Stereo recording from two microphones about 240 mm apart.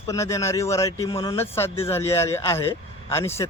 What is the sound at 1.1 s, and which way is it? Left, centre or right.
Speech, left.